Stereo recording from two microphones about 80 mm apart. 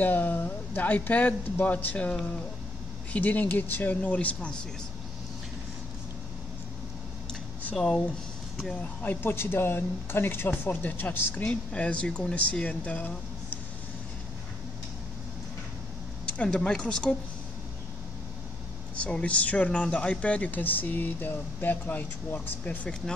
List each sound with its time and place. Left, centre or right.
0.0 s speech: left
7.7 s speech: centre
9.0 s speech: left
16.3 s speech: centre
18.9 s speech: centre